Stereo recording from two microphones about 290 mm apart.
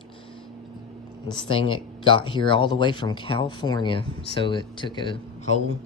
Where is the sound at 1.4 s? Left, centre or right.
Centre.